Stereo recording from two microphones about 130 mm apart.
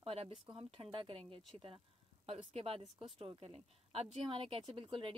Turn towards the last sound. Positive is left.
turn(degrees=-40)  # may be behind; listen again after turning